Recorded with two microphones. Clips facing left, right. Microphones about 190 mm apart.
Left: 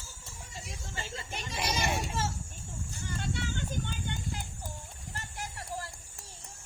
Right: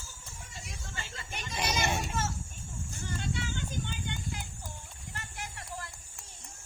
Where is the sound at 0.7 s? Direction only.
30° left (ahead or behind).